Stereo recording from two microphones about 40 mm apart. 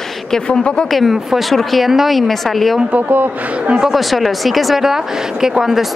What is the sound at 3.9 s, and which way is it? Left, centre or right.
Speech, centre.